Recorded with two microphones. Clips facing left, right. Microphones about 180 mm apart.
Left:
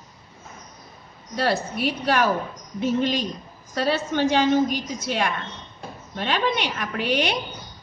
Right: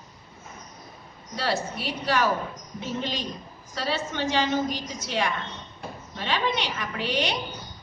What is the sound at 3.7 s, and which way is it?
A woman's voice, 55° left (ahead or behind).